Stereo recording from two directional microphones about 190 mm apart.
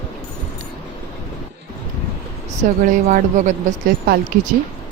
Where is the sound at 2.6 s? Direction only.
45° right (ahead or behind).